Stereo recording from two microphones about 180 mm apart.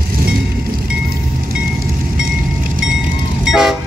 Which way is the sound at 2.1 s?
50° right (ahead or behind).